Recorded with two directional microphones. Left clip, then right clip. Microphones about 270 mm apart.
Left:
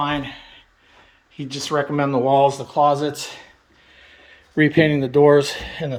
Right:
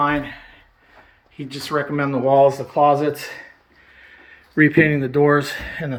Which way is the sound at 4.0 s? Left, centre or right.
Centre.